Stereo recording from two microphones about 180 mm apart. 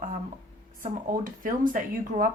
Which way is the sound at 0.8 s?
50° right (ahead or behind).